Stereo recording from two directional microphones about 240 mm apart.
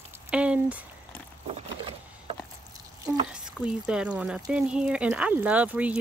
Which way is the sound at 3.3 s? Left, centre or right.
Centre.